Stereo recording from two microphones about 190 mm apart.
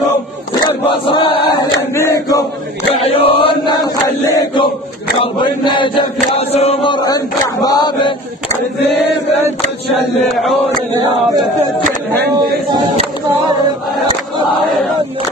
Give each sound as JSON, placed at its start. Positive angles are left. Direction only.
{"t": 0.7, "sound": "chant", "side_deg": 25}
{"t": 1.8, "sound": "chant", "side_deg": 15}
{"t": 3.0, "sound": "chant", "side_deg": 30}